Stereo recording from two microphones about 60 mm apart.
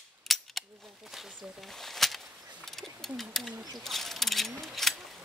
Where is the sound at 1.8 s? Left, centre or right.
Centre.